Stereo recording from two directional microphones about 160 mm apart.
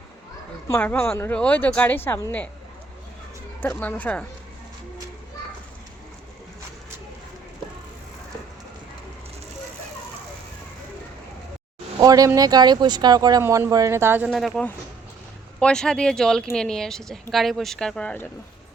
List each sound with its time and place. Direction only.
0.7 s speech: 10° left (ahead or behind)
3.6 s speech: 10° left (ahead or behind)
11.9 s speech: 25° right (ahead or behind)
14.3 s speech: centre (ahead or behind)